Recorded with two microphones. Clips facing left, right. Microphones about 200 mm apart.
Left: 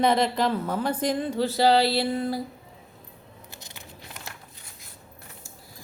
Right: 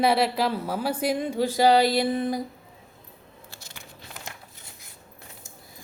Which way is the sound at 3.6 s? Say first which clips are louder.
Left 1 dB; 20° left (ahead or behind).